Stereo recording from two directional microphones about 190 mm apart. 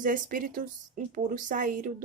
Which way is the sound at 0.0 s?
45° right (ahead or behind).